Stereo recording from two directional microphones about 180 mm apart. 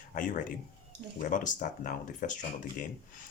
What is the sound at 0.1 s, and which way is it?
Speech, 45° left (ahead or behind).